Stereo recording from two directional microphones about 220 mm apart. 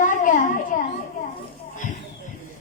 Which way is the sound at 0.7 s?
35° left (ahead or behind).